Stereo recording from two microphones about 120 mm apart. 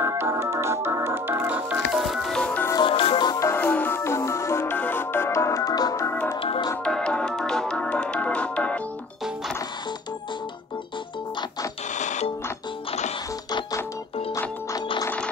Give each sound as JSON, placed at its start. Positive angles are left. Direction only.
{"t": 0.0, "sound": "music", "side_deg": -25}
{"t": 2.8, "sound": "music", "side_deg": 45}
{"t": 3.3, "sound": "music", "side_deg": 20}
{"t": 6.8, "sound": "music", "side_deg": 5}
{"t": 11.9, "sound": "music", "side_deg": 80}
{"t": 13.5, "sound": "music", "side_deg": 35}
{"t": 14.3, "sound": "music", "side_deg": 25}